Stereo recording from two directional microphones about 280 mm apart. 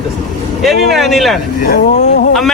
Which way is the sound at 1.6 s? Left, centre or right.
Left.